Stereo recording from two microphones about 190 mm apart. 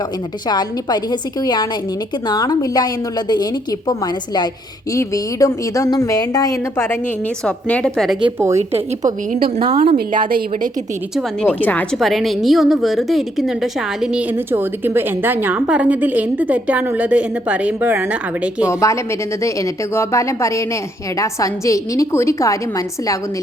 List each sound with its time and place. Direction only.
0.4 s a woman's voice: 20° left (ahead or behind); by 8.2 s centre (ahead or behind)
9.3 s a woman's voice: 50° right (ahead or behind)
11.4 s a woman's voice: 10° left (ahead or behind)
18.7 s speech: 15° left (ahead or behind)